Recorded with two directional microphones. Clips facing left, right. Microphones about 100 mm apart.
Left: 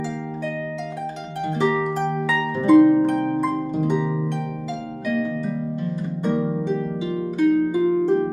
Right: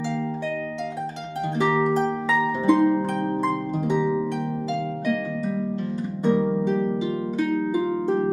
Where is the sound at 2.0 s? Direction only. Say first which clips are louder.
Even; centre (ahead or behind).